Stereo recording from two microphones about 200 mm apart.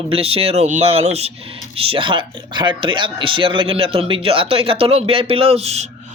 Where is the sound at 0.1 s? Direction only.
30° right (ahead or behind).